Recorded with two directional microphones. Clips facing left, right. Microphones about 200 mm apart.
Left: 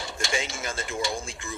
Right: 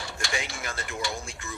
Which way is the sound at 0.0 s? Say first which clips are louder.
Left 3 dB; 20° left (ahead or behind).